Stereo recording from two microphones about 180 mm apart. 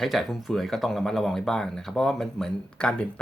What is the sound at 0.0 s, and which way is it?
Speech, centre (ahead or behind).